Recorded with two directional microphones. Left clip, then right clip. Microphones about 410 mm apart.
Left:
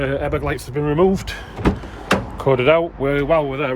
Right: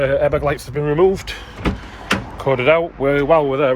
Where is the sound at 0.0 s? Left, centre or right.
Centre.